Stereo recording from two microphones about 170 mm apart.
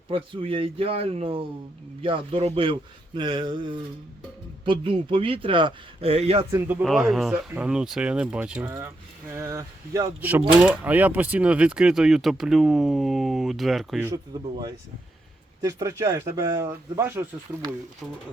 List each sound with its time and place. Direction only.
0.1 s speech: 30° right (ahead or behind)
6.5 s speech: 10° right (ahead or behind)
6.8 s speech: centre (ahead or behind)
14.3 s speech: 25° right (ahead or behind)
15.6 s speech: 20° right (ahead or behind)